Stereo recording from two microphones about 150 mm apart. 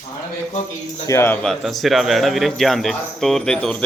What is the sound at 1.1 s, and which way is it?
Speech, 15° left (ahead or behind).